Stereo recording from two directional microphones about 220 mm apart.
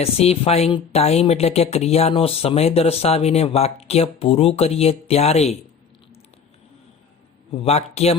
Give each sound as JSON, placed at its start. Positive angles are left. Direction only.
{"t": 0.0, "sound": "a woman's voice", "side_deg": 25}
{"t": 7.5, "sound": "a woman's voice", "side_deg": 30}